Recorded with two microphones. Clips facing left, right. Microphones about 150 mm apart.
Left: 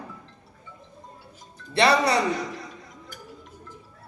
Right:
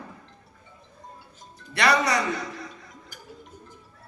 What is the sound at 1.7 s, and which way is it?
Speech, 30° left (ahead or behind).